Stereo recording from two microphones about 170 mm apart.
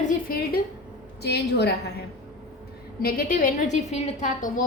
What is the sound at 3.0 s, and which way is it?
A woman's voice, 60° left (ahead or behind).